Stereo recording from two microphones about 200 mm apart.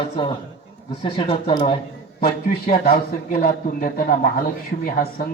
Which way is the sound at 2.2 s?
45° left (ahead or behind).